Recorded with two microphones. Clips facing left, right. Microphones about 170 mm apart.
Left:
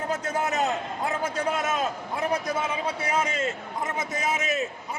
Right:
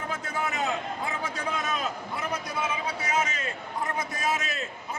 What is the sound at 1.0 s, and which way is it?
Speech, 40° left (ahead or behind).